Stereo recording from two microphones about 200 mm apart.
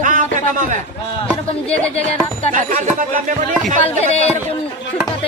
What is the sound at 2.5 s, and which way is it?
Speech, 40° right (ahead or behind).